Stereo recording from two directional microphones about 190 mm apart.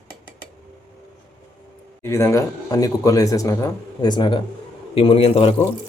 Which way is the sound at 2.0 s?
15° left (ahead or behind).